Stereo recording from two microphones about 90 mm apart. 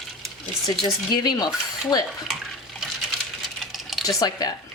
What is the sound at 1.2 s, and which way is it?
Stir, 50° left (ahead or behind).